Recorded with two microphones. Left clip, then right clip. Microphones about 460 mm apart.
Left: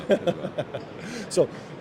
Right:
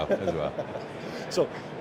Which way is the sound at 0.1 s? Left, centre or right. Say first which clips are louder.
Left 6 dB; left.